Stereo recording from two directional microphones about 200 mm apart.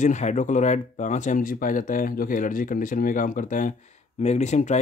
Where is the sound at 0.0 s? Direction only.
35° left (ahead or behind).